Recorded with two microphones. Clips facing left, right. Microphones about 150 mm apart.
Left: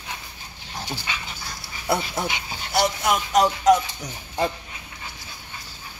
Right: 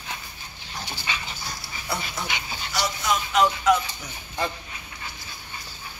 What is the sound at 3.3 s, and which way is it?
Speech, 40° left (ahead or behind).